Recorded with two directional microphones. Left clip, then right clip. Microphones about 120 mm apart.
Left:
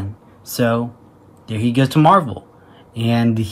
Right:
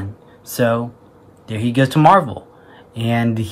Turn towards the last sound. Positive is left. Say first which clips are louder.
# left 1 dB
turn(degrees=-15)  # may be behind; listen again after turning